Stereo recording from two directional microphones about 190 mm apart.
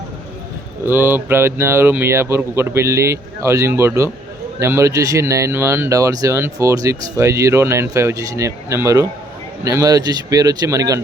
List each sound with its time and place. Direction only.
0.9 s speech: 10° right (ahead or behind)